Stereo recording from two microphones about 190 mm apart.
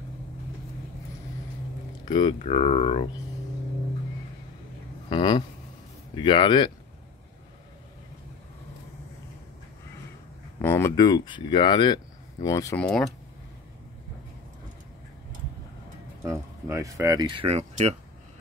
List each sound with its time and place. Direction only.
2.0 s speech: 25° left (ahead or behind)
5.1 s speech: 25° left (ahead or behind)
10.6 s speech: 15° left (ahead or behind)
12.8 s speech: 5° left (ahead or behind)
16.2 s speech: 15° right (ahead or behind); by 17.9 s 35° right (ahead or behind)